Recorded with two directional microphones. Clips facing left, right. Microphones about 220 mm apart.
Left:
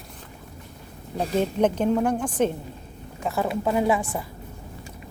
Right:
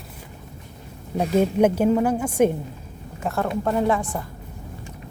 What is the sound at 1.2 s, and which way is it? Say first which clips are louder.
A woman's voice: right 4 dB; 10° right (ahead or behind).